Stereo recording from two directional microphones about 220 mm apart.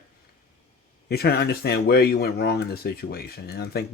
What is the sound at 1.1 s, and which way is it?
Speech, 45° left (ahead or behind).